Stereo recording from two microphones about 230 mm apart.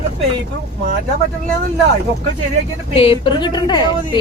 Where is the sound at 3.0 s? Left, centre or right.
Left.